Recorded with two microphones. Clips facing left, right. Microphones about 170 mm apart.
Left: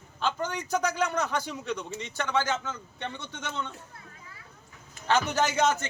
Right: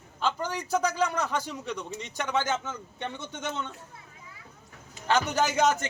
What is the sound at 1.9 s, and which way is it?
Speech, 15° right (ahead or behind).